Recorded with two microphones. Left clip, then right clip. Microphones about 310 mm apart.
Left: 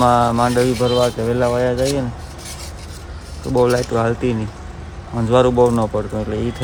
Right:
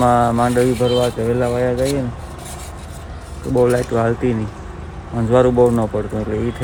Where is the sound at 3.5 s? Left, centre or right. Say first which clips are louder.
Even; centre.